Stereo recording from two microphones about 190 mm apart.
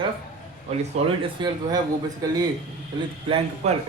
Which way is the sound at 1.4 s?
25° right (ahead or behind).